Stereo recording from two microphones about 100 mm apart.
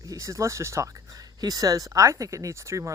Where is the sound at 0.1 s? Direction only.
30° right (ahead or behind).